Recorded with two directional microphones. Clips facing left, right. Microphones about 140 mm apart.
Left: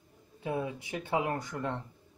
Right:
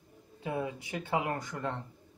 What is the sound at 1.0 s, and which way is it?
Speech, 15° left (ahead or behind).